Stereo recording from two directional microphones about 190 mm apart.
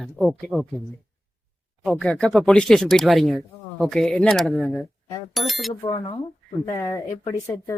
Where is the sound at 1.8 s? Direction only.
Centre (ahead or behind).